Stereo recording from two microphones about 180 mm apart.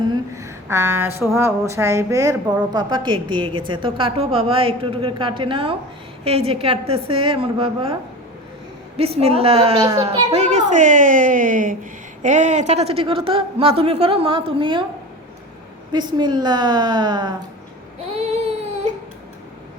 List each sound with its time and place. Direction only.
0.3 s a sound: 15° right (ahead or behind)
1.4 s a woman's voice: 15° right (ahead or behind); by 7.9 s 30° right (ahead or behind)
9.0 s speech: 35° right (ahead or behind)
10.3 s speech: 40° right (ahead or behind)
15.9 s a woman's voice: 25° right (ahead or behind)